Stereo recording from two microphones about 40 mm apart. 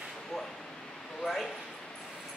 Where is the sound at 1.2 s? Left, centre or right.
Centre.